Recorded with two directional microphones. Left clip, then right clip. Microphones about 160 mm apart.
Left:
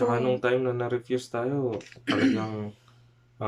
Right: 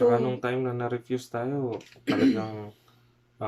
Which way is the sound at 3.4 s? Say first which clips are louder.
Left 1 dB; centre (ahead or behind).